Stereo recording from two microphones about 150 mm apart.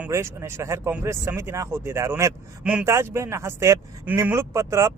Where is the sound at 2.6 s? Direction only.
10° right (ahead or behind).